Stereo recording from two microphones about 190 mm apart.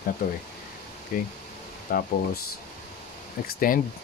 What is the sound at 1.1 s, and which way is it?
Speech, 45° left (ahead or behind).